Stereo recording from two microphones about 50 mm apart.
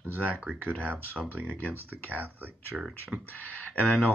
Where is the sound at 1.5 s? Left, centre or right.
Right.